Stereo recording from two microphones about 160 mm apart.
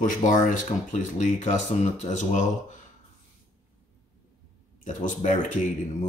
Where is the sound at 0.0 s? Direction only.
55° left (ahead or behind).